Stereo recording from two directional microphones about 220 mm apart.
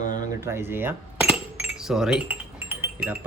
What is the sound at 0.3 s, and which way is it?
Chink, 10° right (ahead or behind).